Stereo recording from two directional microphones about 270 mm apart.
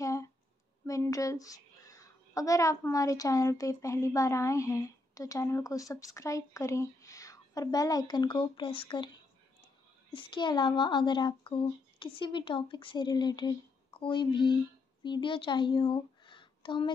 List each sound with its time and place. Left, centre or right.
0.0 s a sound: centre
0.8 s a child's voice: centre
10.1 s a child's voice: centre